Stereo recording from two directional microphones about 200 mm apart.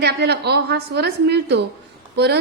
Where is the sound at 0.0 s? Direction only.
55° right (ahead or behind).